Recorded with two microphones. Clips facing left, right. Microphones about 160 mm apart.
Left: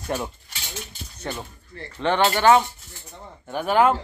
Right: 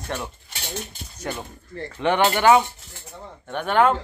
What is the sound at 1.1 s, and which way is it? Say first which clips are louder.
A man's voice: right 1 dB; 10° right (ahead or behind).